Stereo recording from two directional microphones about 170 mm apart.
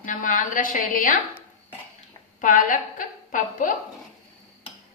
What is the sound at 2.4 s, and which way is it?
A woman's voice, 50° left (ahead or behind).